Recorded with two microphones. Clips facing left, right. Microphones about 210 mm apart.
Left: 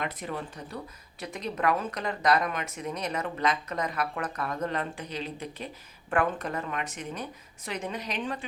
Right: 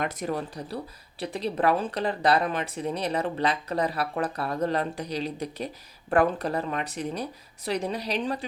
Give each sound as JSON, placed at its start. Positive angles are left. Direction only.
{"t": 0.0, "sound": "speech", "side_deg": -40}